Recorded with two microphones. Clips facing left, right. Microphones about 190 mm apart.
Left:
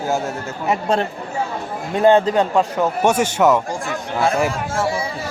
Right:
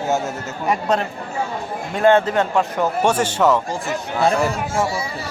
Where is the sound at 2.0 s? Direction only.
15° left (ahead or behind).